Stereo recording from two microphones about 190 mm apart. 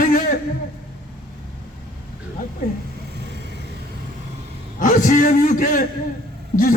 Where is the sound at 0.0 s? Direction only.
45° left (ahead or behind).